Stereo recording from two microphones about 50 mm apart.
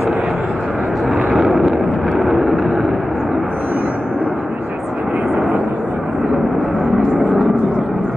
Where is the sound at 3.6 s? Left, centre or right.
Right.